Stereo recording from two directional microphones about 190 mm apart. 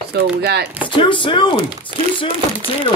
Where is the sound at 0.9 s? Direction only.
25° left (ahead or behind).